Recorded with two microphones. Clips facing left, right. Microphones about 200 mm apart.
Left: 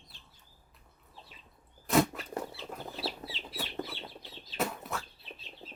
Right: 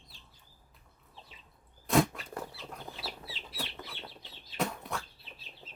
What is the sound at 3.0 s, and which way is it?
Chicken, 30° left (ahead or behind).